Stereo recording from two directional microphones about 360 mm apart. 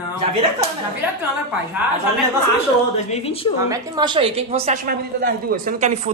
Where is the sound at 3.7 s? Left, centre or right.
Centre.